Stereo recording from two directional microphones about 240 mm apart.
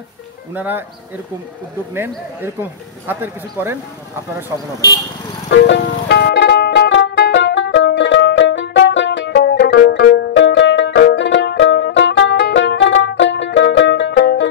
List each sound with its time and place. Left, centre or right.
0.6 s speech: centre
5.5 s music: left